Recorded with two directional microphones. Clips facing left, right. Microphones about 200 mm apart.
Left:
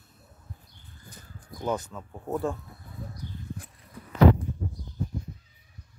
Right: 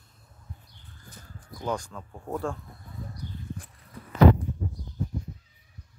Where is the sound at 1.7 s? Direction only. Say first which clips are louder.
Left 1 dB; 5° left (ahead or behind).